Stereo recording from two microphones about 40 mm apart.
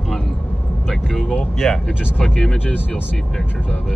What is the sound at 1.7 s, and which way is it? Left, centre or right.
Speech, centre.